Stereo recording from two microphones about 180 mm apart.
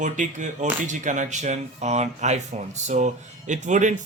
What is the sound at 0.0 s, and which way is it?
Speech, 45° right (ahead or behind).